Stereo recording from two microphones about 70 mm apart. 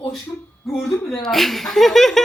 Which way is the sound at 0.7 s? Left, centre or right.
Centre.